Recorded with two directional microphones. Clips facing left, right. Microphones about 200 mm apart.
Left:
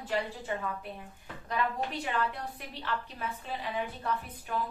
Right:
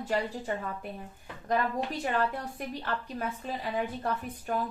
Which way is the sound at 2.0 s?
45° right (ahead or behind).